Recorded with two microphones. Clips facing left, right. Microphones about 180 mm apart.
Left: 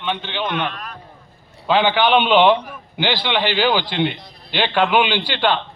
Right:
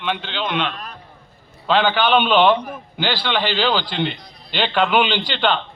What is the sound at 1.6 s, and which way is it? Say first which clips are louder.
A man's voice: left 1 dB; 10° left (ahead or behind).